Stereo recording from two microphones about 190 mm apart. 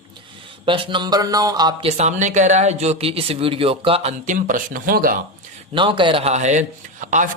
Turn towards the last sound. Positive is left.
turn(degrees=-45)  # may be behind; listen again after turning